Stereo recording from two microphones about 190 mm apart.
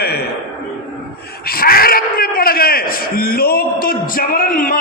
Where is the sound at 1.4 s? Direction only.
50° left (ahead or behind).